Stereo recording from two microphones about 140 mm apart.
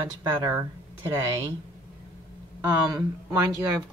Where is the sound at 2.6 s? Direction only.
25° right (ahead or behind).